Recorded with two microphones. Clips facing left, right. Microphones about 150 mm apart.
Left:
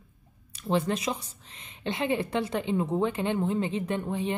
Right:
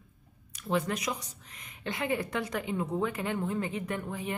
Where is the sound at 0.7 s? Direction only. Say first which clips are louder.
Left 3 dB; 30° left (ahead or behind).